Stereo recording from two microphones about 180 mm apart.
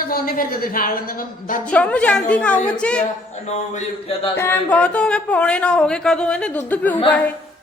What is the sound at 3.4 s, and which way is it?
Speech, 35° left (ahead or behind).